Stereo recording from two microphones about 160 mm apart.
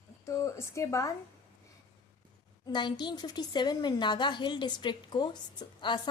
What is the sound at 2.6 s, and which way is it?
A woman's voice, 25° left (ahead or behind).